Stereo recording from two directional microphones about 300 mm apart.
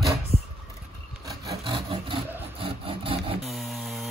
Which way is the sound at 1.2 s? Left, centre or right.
Centre.